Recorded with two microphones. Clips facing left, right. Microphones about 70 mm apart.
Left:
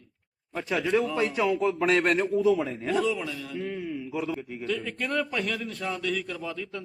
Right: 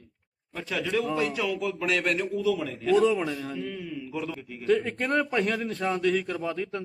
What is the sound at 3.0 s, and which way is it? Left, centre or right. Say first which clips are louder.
Speech: right 4 dB; right.